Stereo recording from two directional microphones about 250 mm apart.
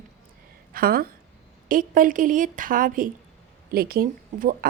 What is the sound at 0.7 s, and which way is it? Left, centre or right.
A woman's voice, right.